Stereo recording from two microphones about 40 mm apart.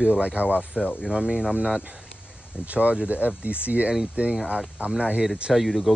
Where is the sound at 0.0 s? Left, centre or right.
Right.